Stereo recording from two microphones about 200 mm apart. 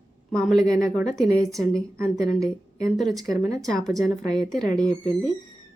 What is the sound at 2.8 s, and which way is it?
Speech, centre (ahead or behind).